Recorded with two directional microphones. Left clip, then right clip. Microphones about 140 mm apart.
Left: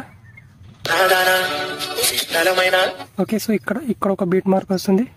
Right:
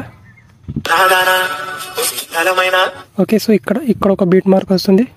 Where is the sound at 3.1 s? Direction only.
35° right (ahead or behind).